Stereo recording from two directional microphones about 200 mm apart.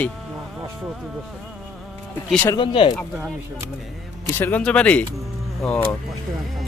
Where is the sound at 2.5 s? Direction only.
25° left (ahead or behind).